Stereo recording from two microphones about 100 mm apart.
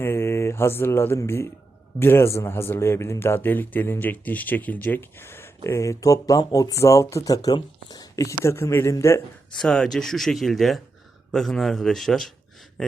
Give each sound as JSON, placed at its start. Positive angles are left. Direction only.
{"t": 0.0, "sound": "mantra", "side_deg": 25}
{"t": 2.0, "sound": "speech", "side_deg": 25}
{"t": 9.6, "sound": "speech", "side_deg": 5}